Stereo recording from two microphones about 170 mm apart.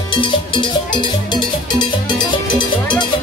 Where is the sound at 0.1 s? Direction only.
30° left (ahead or behind).